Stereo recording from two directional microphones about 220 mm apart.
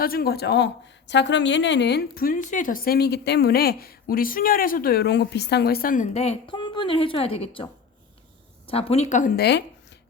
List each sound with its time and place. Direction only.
0.0 s a woman's voice: 45° left (ahead or behind)